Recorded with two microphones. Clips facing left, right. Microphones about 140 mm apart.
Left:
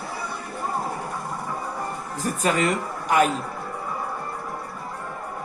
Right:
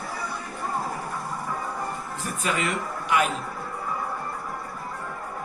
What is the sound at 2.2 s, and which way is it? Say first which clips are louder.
A woman's voice: left 6 dB; 40° left (ahead or behind).